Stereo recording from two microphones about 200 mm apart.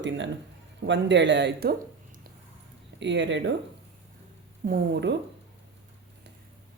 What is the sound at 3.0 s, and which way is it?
Speech, 65° right (ahead or behind).